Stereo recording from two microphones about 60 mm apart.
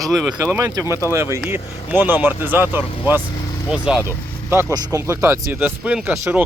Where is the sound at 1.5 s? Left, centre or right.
Right.